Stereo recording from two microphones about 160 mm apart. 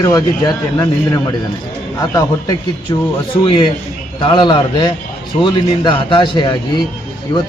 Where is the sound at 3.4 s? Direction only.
30° left (ahead or behind).